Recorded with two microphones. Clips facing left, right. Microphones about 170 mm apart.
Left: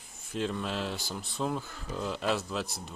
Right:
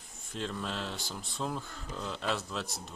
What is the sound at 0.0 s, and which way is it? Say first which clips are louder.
Speech: left 5 dB; centre (ahead or behind).